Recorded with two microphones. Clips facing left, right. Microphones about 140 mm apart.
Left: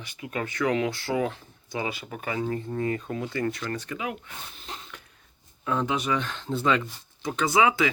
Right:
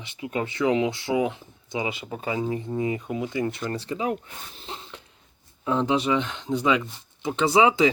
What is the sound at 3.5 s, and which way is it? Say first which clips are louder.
Speech: right 2 dB; 25° right (ahead or behind).